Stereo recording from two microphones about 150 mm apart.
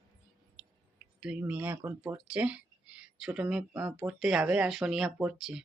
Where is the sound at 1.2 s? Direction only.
5° right (ahead or behind).